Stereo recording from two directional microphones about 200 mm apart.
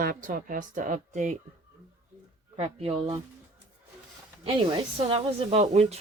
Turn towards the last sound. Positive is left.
turn(degrees=-35)  # may be behind; listen again after turning